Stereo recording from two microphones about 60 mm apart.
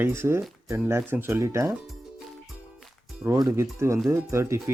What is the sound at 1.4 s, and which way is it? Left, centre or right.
Speech, right.